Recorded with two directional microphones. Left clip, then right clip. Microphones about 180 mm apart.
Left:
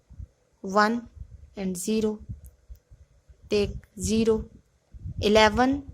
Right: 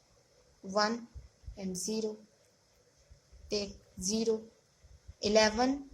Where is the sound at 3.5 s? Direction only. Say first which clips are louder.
Left 11 dB; 45° left (ahead or behind).